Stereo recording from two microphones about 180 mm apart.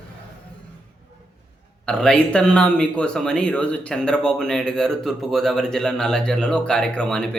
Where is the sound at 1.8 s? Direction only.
5° left (ahead or behind).